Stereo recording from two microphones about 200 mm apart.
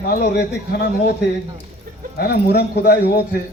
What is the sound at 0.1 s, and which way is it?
Speech, 50° left (ahead or behind).